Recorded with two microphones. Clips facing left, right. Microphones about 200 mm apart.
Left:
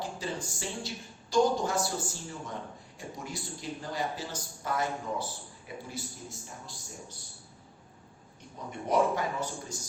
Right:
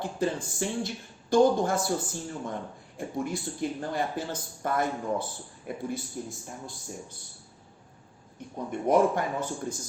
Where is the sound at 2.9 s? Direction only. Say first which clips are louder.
Right 9 dB; 55° right (ahead or behind).